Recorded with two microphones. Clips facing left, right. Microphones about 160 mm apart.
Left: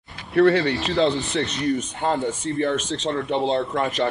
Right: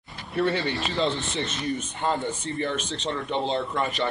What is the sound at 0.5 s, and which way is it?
Speech, centre (ahead or behind).